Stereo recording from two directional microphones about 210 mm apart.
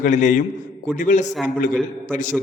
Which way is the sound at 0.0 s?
35° left (ahead or behind).